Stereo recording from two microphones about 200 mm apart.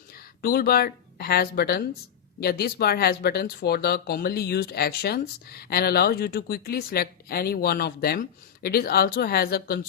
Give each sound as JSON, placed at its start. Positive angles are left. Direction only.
{"t": 0.1, "sound": "speech", "side_deg": 50}